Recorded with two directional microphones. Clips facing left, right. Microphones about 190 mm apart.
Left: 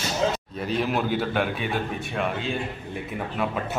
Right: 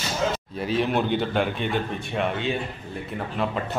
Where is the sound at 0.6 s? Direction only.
Centre (ahead or behind).